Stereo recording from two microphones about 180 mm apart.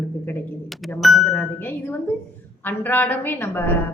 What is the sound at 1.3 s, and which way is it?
A woman's voice, 10° left (ahead or behind).